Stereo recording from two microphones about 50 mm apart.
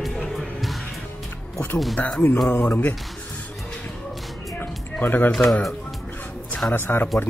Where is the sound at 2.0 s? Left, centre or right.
Left.